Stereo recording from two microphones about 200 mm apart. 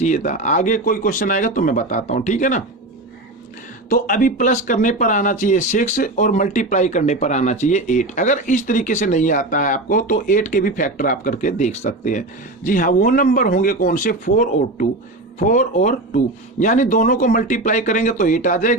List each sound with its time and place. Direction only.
0.0 s speech: 40° left (ahead or behind)
3.8 s speech: 40° left (ahead or behind)